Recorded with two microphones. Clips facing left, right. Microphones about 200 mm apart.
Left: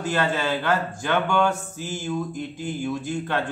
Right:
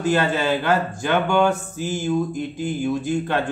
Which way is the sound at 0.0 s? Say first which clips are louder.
Right 4 dB; 10° right (ahead or behind).